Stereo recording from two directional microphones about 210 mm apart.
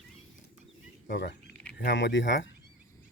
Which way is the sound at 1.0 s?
55° left (ahead or behind).